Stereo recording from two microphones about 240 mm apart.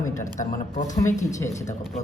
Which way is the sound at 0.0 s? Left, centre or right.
Centre.